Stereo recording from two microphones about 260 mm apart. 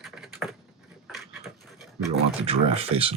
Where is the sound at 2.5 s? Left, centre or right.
Right.